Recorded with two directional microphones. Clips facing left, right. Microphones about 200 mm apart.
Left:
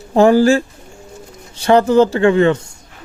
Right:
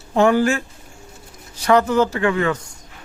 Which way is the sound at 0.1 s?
35° left (ahead or behind).